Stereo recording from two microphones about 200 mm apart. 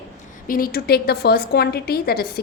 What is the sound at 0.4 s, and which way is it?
A woman's voice, 45° left (ahead or behind).